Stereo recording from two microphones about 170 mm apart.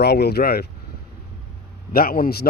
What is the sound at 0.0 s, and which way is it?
Speech, 75° left (ahead or behind).